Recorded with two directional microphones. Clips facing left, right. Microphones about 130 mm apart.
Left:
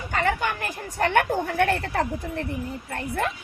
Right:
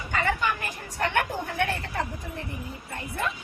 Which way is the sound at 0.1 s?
45° left (ahead or behind).